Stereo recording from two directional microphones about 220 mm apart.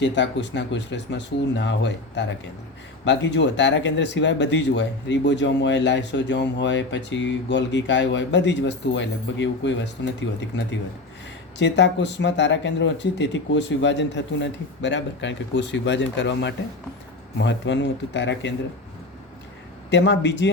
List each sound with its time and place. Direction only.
0.0 s speech: 55° left (ahead or behind)
19.9 s speech: 50° left (ahead or behind)